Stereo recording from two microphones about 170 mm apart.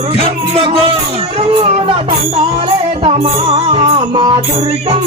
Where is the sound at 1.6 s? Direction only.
35° right (ahead or behind).